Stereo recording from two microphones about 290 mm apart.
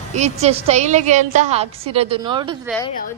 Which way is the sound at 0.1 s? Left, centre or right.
Right.